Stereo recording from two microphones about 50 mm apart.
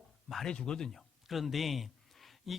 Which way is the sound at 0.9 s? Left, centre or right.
Centre.